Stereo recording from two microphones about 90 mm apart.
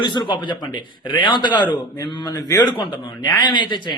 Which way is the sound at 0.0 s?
60° left (ahead or behind).